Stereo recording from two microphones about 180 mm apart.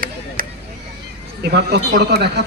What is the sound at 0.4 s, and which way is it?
Vehicle, 50° right (ahead or behind).